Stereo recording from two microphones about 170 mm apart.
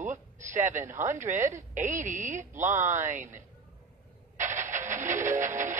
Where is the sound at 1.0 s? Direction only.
45° right (ahead or behind).